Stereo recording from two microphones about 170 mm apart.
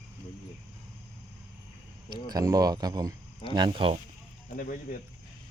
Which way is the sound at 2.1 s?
20° right (ahead or behind).